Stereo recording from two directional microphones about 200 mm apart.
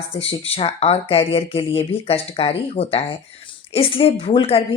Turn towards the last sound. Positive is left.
turn(degrees=30)  # may be behind; listen again after turning